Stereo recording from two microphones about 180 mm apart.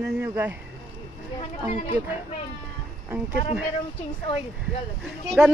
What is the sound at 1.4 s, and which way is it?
Speech, 40° left (ahead or behind).